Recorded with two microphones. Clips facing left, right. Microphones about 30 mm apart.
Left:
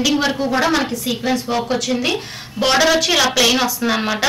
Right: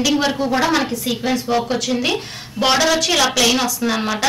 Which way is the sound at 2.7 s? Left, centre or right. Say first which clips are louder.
Left 3 dB; centre.